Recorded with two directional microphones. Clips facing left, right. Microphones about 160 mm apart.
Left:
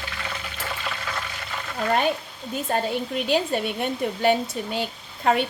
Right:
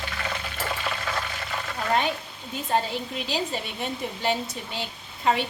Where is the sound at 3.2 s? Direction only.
55° left (ahead or behind).